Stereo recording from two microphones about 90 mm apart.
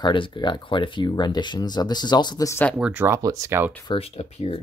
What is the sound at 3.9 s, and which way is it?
Speech, 90° left.